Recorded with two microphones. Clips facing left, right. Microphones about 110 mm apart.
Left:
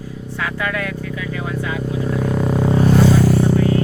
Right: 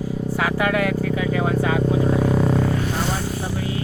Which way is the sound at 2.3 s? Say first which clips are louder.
Even; centre (ahead or behind).